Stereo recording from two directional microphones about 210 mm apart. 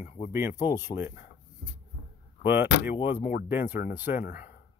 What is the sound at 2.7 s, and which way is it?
Speech, 55° left (ahead or behind).